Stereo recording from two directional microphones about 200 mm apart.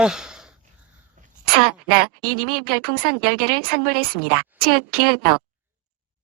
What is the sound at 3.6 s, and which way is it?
A woman's voice, 50° right (ahead or behind).